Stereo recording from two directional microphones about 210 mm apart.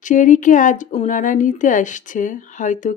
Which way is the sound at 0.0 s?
35° left (ahead or behind).